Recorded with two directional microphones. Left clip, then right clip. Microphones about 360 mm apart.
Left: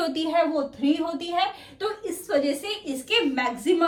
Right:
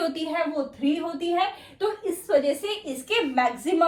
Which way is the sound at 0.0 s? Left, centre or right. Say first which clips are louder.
Left 3 dB; centre.